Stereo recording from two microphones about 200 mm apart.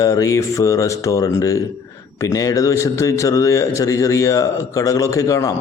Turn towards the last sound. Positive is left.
turn(degrees=15)  # may be behind; listen again after turning